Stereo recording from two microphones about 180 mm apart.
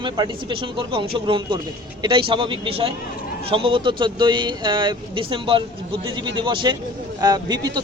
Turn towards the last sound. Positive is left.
turn(degrees=-20)  # may be behind; listen again after turning